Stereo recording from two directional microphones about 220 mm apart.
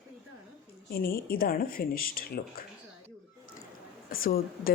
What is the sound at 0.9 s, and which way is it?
A woman's voice, 45° left (ahead or behind).